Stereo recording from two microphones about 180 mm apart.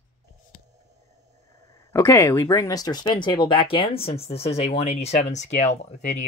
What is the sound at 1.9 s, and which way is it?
Speech, 15° left (ahead or behind).